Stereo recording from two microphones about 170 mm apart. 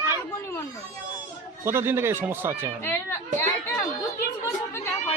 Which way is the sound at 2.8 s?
15° left (ahead or behind).